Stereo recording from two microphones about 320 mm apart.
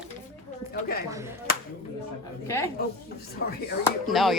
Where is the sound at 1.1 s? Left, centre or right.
Centre.